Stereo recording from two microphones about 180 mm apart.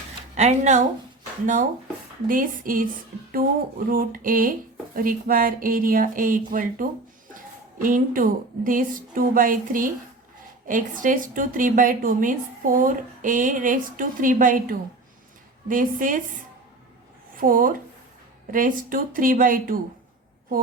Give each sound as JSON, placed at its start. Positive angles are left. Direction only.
{"t": 0.3, "sound": "speech", "side_deg": -40}
{"t": 2.2, "sound": "a woman's voice", "side_deg": -50}
{"t": 3.8, "sound": "a woman's voice", "side_deg": -50}
{"t": 17.3, "sound": "a woman's voice", "side_deg": -50}